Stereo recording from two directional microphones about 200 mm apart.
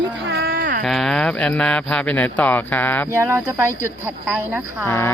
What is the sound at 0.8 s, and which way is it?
Speech, centre (ahead or behind).